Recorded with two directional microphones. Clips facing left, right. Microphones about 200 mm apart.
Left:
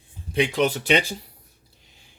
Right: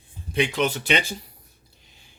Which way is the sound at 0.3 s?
35° left (ahead or behind).